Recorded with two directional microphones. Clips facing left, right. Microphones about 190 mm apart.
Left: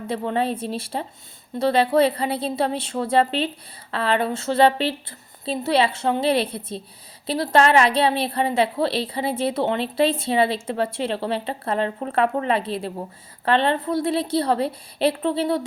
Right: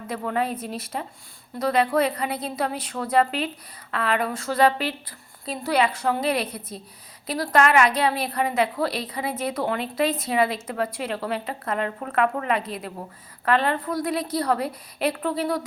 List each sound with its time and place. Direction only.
0.1 s a woman's voice: 25° left (ahead or behind)